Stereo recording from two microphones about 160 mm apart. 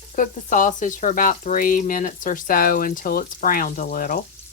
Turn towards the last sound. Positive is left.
turn(degrees=60)  # may be behind; listen again after turning